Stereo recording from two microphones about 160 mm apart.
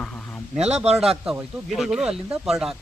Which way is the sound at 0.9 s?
40° right (ahead or behind).